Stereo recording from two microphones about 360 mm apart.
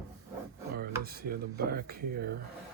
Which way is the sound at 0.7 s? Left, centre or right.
Right.